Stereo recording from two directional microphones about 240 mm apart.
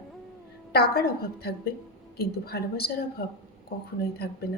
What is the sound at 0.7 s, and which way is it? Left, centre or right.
A woman's voice, left.